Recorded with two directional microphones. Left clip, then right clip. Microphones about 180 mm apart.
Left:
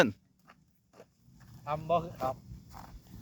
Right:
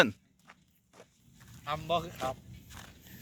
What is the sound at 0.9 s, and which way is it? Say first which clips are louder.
Zipper: even; 55° left (ahead or behind).